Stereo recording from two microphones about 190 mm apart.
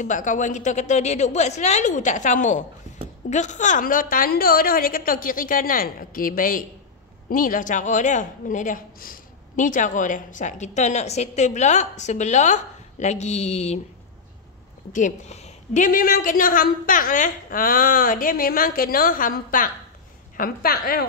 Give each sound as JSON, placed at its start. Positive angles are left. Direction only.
{"t": 0.0, "sound": "a woman's voice", "side_deg": 40}
{"t": 15.0, "sound": "a woman's voice", "side_deg": 40}